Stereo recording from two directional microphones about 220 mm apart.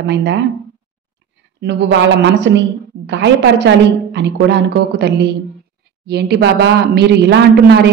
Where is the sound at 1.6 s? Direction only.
50° right (ahead or behind).